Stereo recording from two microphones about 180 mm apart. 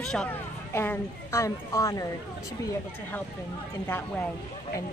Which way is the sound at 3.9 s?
10° left (ahead or behind).